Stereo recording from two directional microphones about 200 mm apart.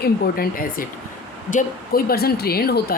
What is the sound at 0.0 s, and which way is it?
Speech, 45° left (ahead or behind).